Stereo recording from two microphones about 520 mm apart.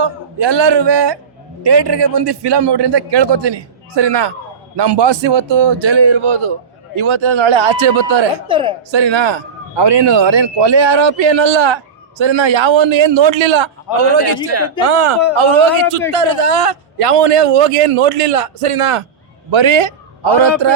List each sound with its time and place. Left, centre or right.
0.0 s a man's voice: right
8.4 s speech: centre
8.9 s speech: right
14.2 s a man's voice: right
14.8 s a man's voice: right
19.5 s speech: right